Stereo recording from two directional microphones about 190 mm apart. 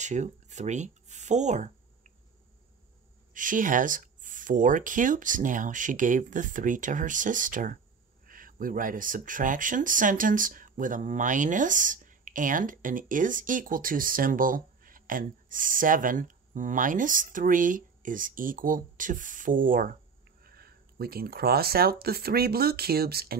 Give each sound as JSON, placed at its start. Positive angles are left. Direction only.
{"t": 0.0, "sound": "speech", "side_deg": -40}
{"t": 3.3, "sound": "speech", "side_deg": -45}